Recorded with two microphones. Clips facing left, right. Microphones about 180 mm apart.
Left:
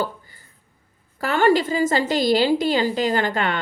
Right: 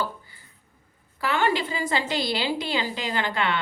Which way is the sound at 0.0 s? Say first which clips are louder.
Left 4 dB; 45° left (ahead or behind).